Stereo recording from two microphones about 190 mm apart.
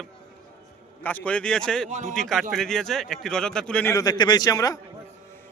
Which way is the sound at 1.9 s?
40° right (ahead or behind).